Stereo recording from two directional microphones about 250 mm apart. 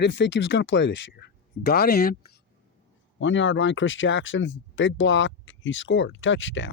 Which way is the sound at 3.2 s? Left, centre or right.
Left.